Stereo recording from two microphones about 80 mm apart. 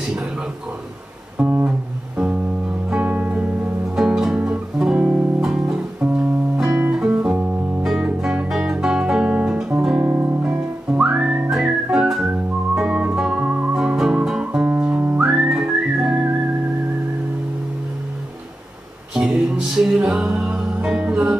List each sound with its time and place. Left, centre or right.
1.4 s music: right
2.9 s music: centre
3.9 s music: centre
7.8 s guitar: centre
10.0 s music: right
10.4 s whistling: centre
11.5 s music: centre
15.2 s whistling: centre
19.1 s music: centre